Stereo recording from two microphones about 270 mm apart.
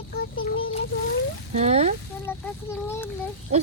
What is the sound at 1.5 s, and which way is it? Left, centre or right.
Speech, right.